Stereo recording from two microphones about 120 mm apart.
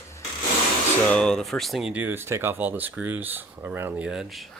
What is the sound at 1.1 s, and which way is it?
Speech, 5° left (ahead or behind).